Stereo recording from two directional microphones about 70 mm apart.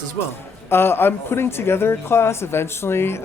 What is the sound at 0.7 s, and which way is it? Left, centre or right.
Speech, left.